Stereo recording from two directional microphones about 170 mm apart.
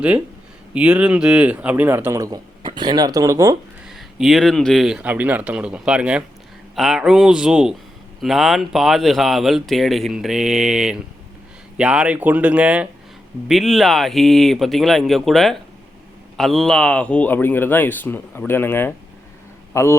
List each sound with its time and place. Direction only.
0.7 s a man's voice: 5° right (ahead or behind)
3.8 s a man's voice: centre (ahead or behind); by 20.0 s 15° left (ahead or behind)